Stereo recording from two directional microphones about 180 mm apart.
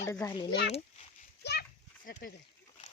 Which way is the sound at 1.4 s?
65° left (ahead or behind).